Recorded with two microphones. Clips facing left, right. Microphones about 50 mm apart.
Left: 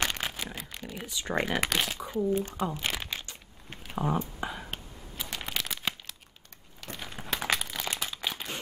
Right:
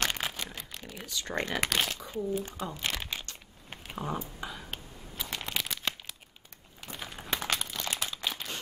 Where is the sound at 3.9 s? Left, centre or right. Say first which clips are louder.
Left 5 dB; centre.